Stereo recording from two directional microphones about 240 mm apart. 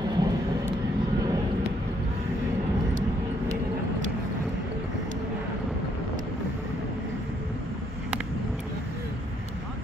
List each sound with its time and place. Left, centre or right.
0.0 s vehicle: centre